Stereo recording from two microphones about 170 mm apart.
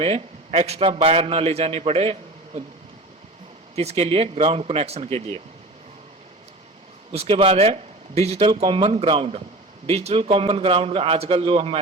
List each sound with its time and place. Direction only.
0.0 s speech: 35° right (ahead or behind)
3.8 s speech: 40° right (ahead or behind)
7.1 s speech: 35° right (ahead or behind)